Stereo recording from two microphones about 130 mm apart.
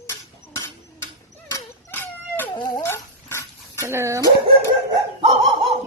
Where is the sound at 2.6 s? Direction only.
25° left (ahead or behind).